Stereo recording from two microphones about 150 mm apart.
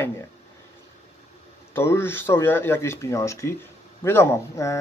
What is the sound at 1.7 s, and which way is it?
Speech, 15° left (ahead or behind).